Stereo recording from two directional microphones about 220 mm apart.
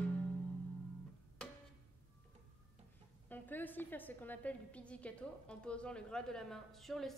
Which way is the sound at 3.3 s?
10° left (ahead or behind).